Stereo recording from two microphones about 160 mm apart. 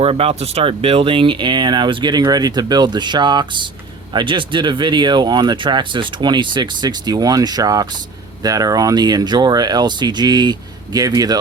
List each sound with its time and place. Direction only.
0.0 s speech: 35° right (ahead or behind)